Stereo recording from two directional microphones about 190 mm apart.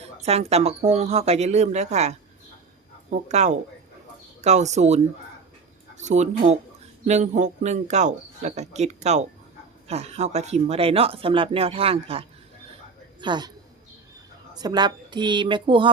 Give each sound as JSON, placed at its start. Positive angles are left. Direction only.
{"t": 0.0, "sound": "speech", "side_deg": -35}
{"t": 6.0, "sound": "speech", "side_deg": -40}
{"t": 13.2, "sound": "a woman's voice", "side_deg": -25}
{"t": 14.5, "sound": "a woman's voice", "side_deg": -20}